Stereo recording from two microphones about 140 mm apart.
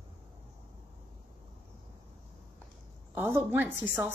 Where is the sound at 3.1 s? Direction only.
15° right (ahead or behind).